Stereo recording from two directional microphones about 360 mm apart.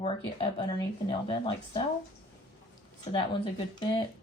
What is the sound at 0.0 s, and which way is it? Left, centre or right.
Speech, centre.